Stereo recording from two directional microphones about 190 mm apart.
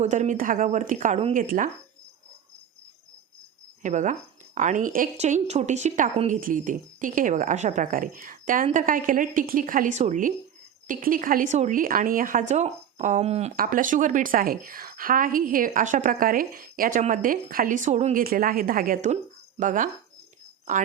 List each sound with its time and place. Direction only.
0.0 s a woman's voice: 40° right (ahead or behind)
3.8 s a woman's voice: 40° right (ahead or behind)
13.6 s a woman's voice: 45° right (ahead or behind)